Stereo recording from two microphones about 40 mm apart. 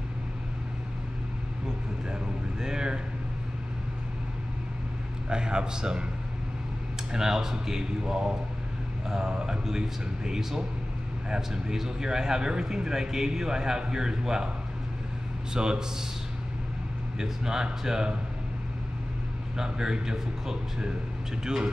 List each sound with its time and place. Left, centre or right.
2.6 s a man's voice: centre
5.3 s speech: right
7.1 s a man's voice: centre
15.5 s speech: centre
17.2 s a man's voice: centre
19.5 s a man's voice: centre